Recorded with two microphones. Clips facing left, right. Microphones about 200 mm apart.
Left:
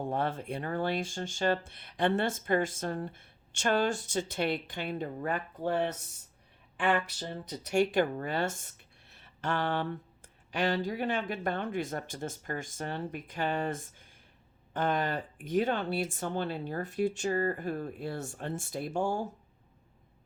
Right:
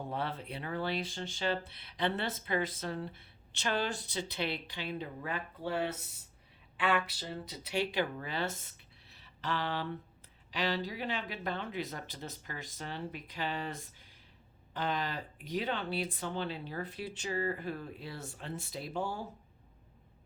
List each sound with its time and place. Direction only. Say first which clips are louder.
0.1 s speech: left 5 dB; 45° left (ahead or behind)